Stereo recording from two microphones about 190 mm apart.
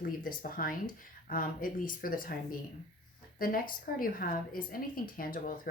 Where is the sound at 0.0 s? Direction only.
50° left (ahead or behind).